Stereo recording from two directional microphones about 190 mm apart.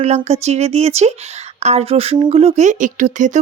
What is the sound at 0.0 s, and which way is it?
Speech, 35° right (ahead or behind).